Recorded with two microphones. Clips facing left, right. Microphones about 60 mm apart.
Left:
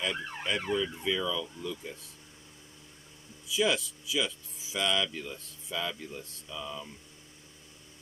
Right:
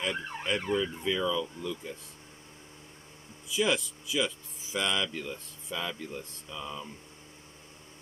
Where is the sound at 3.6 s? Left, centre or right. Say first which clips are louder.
Even; right.